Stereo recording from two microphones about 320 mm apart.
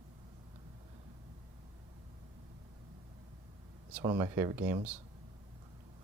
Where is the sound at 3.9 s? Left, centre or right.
Centre.